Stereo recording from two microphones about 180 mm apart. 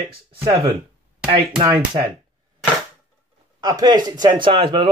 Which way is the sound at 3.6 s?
20° right (ahead or behind).